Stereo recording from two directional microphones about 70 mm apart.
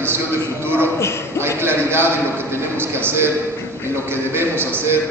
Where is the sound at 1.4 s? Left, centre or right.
Right.